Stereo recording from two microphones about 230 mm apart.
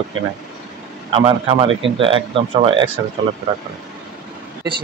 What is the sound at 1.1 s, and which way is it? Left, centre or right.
Speech, right.